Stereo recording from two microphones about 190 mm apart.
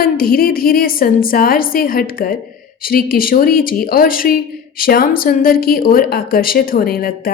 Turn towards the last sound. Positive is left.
turn(degrees=50)  # may be behind; listen again after turning